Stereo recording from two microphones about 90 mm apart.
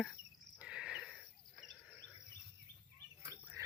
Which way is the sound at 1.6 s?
Centre (ahead or behind).